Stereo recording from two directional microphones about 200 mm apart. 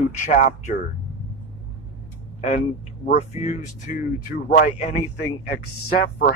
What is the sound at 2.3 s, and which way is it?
Speech, 35° left (ahead or behind).